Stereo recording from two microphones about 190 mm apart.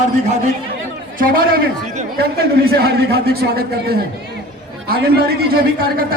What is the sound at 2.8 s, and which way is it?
A man's voice, 55° right (ahead or behind).